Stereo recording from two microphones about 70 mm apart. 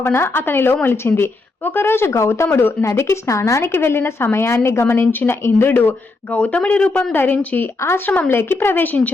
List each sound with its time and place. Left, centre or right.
0.0 s a woman's voice: left
2.5 s a woman's voice: left
6.3 s speech: centre
7.1 s a woman's voice: left